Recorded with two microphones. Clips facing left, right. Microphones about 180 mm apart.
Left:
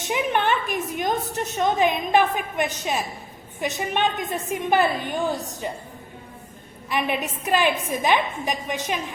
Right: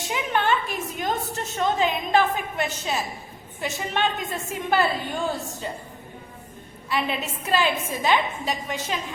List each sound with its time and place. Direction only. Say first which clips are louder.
0.0 s a woman's voice: left 2 dB; 20° left (ahead or behind)
6.9 s a woman's voice: left 2 dB; 15° left (ahead or behind)